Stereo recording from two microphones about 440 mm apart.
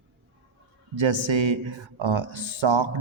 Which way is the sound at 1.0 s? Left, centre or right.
Right.